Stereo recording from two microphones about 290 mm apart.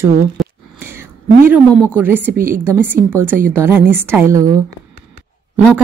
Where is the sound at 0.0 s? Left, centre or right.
Centre.